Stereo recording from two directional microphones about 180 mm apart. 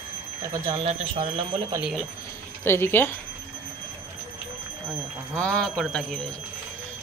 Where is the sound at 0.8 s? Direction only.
30° right (ahead or behind).